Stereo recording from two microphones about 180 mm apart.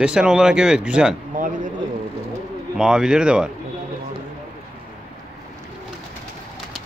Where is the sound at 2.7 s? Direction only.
5° right (ahead or behind).